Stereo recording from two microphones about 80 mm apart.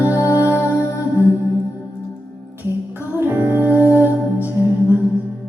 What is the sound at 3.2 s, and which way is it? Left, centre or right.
Music, right.